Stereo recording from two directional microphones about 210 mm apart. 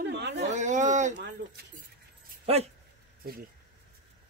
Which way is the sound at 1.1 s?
55° right (ahead or behind).